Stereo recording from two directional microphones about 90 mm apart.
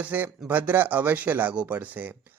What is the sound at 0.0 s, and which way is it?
Speech, 20° right (ahead or behind).